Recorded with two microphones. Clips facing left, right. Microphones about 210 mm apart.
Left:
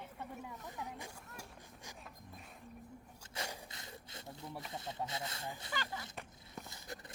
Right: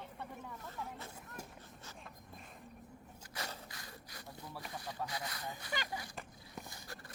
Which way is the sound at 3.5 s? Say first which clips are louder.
Left 1 dB; 25° left (ahead or behind).